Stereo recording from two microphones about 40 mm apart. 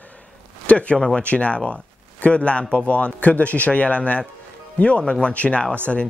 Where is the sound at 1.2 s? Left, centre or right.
Left.